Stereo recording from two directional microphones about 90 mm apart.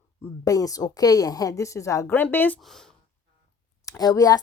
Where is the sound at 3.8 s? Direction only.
40° left (ahead or behind).